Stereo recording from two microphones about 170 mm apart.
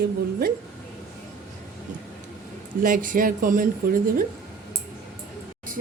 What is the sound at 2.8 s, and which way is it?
Speech, 55° right (ahead or behind).